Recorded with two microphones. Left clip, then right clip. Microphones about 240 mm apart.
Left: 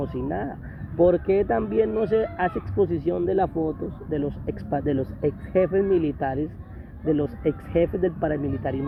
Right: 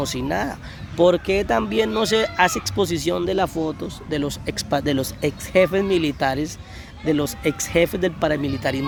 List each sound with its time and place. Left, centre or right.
0.2 s speech: right